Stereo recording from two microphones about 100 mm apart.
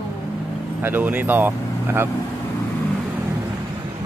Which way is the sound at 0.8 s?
20° right (ahead or behind).